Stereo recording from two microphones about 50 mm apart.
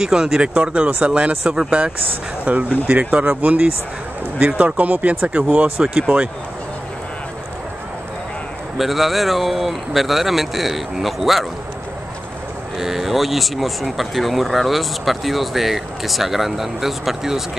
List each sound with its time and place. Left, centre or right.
0.0 s speech: centre
8.7 s speech: centre
12.7 s speech: centre